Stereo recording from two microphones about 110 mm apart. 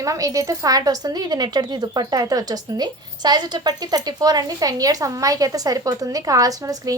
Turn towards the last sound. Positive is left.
turn(degrees=-30)  # may be behind; listen again after turning